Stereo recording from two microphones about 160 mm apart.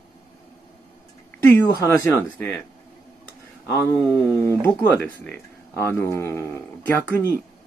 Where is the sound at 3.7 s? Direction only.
15° left (ahead or behind).